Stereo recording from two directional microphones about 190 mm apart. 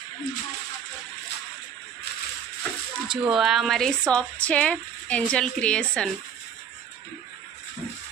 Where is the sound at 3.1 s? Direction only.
Centre (ahead or behind).